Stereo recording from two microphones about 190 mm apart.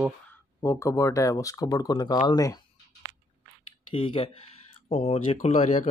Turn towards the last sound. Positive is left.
turn(degrees=40)  # may be behind; listen again after turning